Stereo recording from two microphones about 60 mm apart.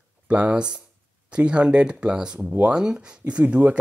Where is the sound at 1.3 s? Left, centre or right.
Centre.